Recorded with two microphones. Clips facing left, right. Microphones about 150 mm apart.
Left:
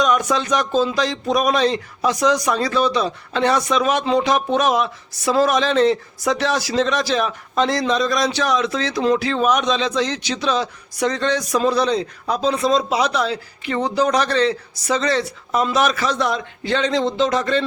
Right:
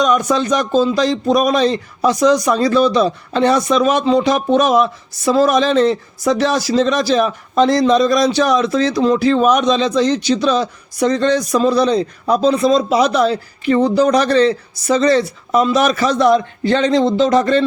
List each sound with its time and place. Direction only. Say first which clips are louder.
0.0 s a man's voice: right 4 dB; 40° right (ahead or behind)